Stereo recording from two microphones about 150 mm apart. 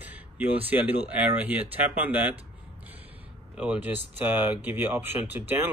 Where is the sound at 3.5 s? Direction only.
10° right (ahead or behind).